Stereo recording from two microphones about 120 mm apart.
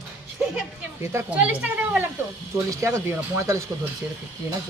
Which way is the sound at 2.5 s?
25° right (ahead or behind).